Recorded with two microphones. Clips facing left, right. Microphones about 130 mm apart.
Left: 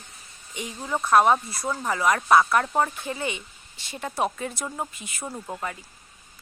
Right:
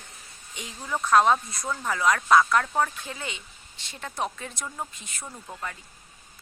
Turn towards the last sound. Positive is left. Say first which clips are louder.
# left 5 dB
turn(degrees=30)  # may be behind; listen again after turning